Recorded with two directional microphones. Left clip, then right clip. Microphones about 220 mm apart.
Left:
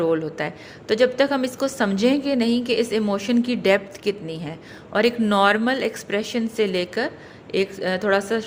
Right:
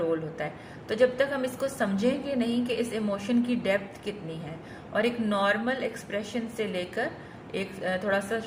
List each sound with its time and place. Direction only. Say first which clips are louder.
0.1 s a woman's voice: left 7 dB; 45° left (ahead or behind)